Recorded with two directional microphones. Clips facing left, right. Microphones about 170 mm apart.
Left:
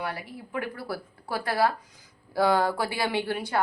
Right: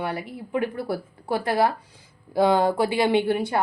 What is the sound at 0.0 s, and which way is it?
Speech, 20° right (ahead or behind).